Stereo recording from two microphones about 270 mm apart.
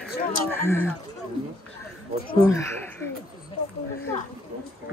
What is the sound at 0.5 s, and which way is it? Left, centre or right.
Speech, centre.